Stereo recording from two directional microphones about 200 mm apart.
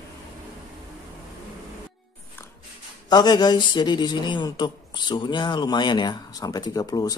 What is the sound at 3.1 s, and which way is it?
A man's voice, 20° left (ahead or behind).